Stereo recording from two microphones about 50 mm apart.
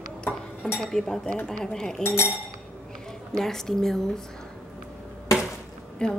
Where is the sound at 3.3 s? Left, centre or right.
Centre.